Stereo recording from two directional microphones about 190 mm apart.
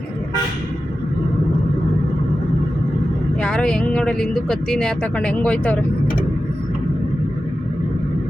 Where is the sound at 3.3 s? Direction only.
5° left (ahead or behind).